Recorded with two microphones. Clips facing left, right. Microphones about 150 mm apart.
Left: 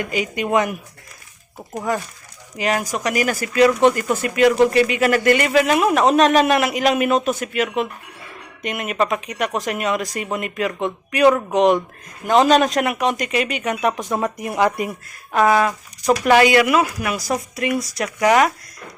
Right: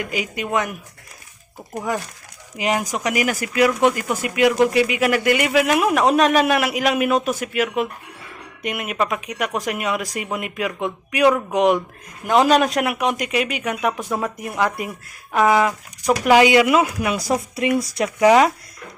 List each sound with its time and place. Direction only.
0.0 s a woman's voice: 5° right (ahead or behind)
1.7 s speech: 10° right (ahead or behind)
15.3 s speech: 10° right (ahead or behind)